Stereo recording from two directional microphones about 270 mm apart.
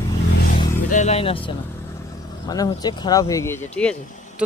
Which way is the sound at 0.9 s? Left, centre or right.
Left.